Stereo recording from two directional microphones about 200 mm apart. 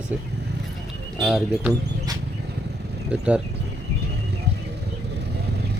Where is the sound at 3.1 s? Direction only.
5° right (ahead or behind).